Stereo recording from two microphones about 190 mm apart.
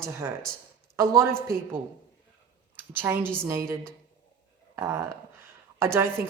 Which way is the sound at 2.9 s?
10° right (ahead or behind).